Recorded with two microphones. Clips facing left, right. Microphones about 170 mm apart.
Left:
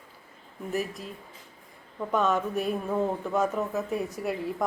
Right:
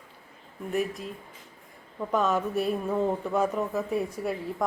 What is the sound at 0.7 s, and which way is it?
Speech, centre (ahead or behind).